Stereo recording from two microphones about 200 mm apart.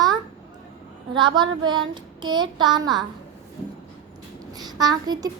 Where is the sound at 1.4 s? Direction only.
20° right (ahead or behind).